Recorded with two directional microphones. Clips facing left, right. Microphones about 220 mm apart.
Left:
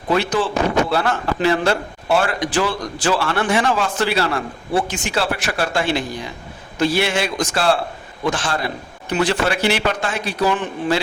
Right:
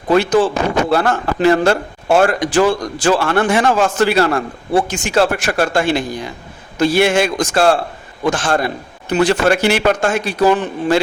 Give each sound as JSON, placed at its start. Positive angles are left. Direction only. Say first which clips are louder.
{"t": 0.1, "sound": "speech", "louder": "right 6 dB", "side_deg": -45}